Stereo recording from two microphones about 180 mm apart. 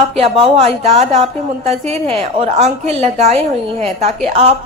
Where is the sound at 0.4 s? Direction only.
30° right (ahead or behind).